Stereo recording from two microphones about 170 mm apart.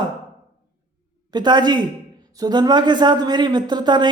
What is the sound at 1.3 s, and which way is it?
A man's voice, 25° right (ahead or behind).